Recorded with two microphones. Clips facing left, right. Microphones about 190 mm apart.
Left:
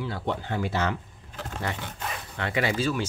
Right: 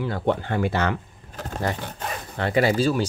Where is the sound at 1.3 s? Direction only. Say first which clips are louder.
Right 5 dB; 40° right (ahead or behind).